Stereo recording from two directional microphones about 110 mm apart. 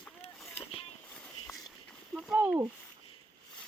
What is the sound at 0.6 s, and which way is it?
Boat, 60° left (ahead or behind).